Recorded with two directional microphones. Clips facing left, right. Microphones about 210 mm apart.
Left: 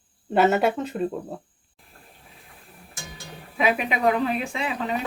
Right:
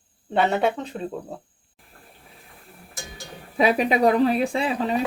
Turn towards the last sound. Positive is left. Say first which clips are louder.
# right 4 dB
turn(degrees=-35)  # may be behind; listen again after turning